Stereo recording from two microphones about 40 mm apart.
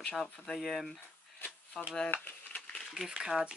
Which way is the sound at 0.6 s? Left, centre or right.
Centre.